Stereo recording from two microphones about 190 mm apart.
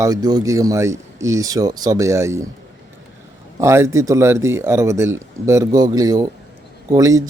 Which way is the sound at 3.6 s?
15° right (ahead or behind).